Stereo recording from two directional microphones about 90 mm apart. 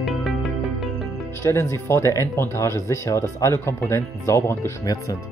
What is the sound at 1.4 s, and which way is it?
Speech, 30° left (ahead or behind).